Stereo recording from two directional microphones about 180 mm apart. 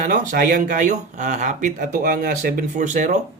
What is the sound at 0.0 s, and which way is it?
Speech, 50° right (ahead or behind).